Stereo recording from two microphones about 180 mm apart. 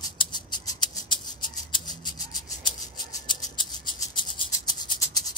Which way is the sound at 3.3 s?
25° left (ahead or behind).